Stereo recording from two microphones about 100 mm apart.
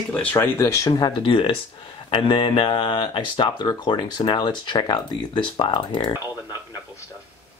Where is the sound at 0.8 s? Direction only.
50° left (ahead or behind).